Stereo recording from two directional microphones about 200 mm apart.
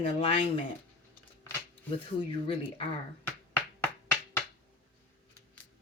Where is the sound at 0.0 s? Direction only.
25° left (ahead or behind).